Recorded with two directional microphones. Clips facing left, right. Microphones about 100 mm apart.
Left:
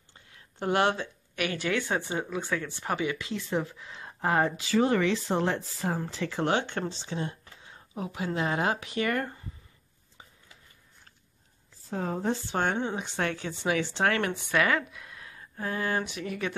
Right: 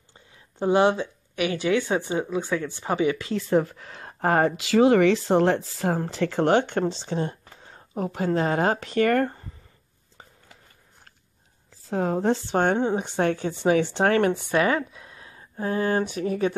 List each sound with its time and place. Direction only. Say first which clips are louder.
0.6 s speech: right 6 dB; 20° right (ahead or behind)
3.0 s a woman's voice: right 7 dB; 35° right (ahead or behind)
11.9 s speech: right 7 dB; 80° right
12.5 s a woman's voice: right 7 dB; 45° right (ahead or behind)